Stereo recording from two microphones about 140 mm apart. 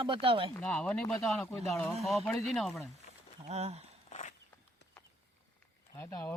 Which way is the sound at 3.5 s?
50° right (ahead or behind).